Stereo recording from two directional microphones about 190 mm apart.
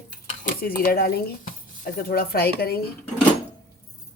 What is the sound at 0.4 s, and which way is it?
A woman's voice, 50° left (ahead or behind).